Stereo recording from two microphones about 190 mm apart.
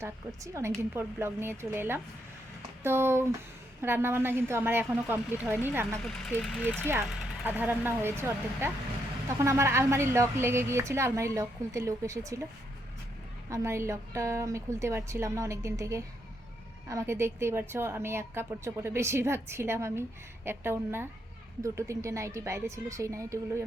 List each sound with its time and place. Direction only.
0.0 s a woman's voice: 15° right (ahead or behind)
6.0 s speech: centre (ahead or behind)
7.0 s a woman's voice: 10° right (ahead or behind)
13.5 s a woman's voice: 15° right (ahead or behind)